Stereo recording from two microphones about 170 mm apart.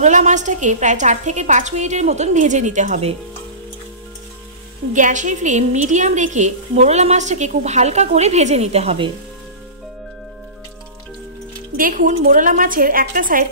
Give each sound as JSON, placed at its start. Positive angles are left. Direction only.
{"t": 0.0, "sound": "a woman's voice", "side_deg": -45}
{"t": 4.9, "sound": "a woman's voice", "side_deg": -45}
{"t": 11.7, "sound": "a woman's voice", "side_deg": -55}